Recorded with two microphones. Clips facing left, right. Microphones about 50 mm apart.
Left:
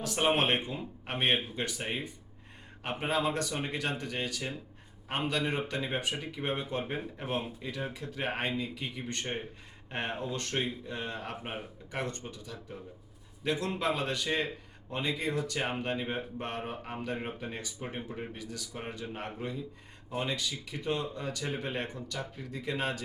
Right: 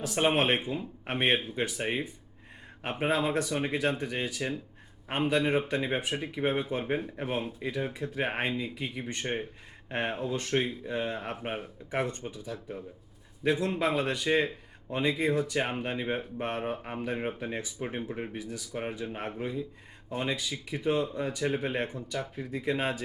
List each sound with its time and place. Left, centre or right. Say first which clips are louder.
0.2 s speech: right 2 dB; centre